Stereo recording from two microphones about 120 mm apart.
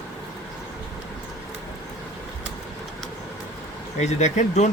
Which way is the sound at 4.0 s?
75° left (ahead or behind).